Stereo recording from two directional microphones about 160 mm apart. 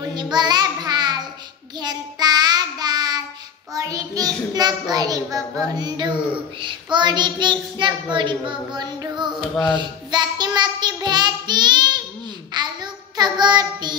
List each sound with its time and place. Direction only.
0.1 s child singing: 25° right (ahead or behind)
4.6 s a child's voice: 25° right (ahead or behind)
9.8 s child singing: 25° right (ahead or behind)